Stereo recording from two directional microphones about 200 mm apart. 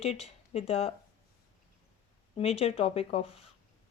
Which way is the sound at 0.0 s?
30° left (ahead or behind).